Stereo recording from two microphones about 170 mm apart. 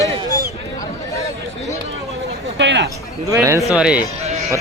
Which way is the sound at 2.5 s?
90° right.